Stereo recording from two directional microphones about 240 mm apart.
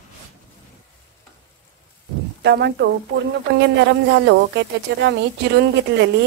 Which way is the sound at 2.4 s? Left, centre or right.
Right.